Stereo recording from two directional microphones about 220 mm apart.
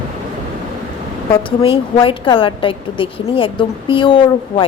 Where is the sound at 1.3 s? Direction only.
25° left (ahead or behind).